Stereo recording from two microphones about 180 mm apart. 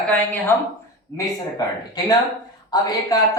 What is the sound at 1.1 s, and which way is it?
A woman's voice, 20° left (ahead or behind).